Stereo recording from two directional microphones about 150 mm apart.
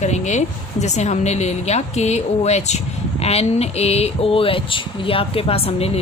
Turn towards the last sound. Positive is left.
turn(degrees=40)  # may be behind; listen again after turning